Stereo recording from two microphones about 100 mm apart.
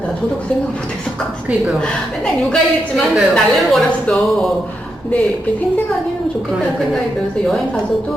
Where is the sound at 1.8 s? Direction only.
5° left (ahead or behind).